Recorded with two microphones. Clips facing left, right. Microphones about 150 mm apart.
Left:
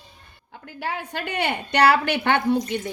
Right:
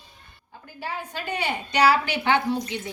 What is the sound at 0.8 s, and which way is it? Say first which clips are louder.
A woman's voice: left 3 dB; 65° left (ahead or behind).